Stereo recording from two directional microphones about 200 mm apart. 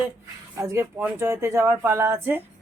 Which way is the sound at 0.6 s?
15° right (ahead or behind).